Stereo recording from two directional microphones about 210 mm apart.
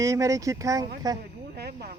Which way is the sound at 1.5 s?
50° right (ahead or behind).